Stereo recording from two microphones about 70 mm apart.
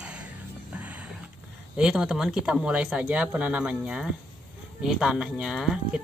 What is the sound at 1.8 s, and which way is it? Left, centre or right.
Speech, centre.